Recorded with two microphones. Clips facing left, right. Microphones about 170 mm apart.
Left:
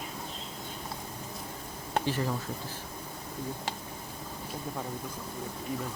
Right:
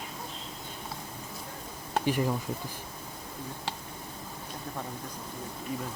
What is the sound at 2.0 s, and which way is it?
Speech, 15° right (ahead or behind).